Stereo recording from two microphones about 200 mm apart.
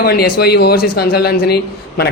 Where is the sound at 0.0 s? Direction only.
50° left (ahead or behind).